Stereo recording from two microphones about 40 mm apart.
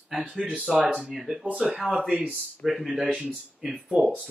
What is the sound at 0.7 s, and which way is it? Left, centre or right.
Speech, centre.